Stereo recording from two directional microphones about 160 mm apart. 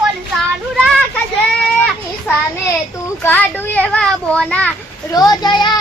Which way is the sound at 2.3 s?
15° left (ahead or behind).